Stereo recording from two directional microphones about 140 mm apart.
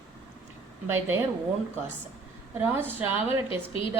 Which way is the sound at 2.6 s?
15° right (ahead or behind).